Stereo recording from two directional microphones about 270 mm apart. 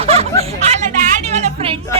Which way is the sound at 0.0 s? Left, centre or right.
Right.